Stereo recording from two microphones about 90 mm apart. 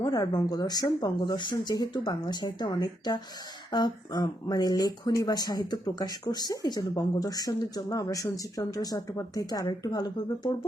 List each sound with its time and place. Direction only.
0.0 s speech: 45° left (ahead or behind)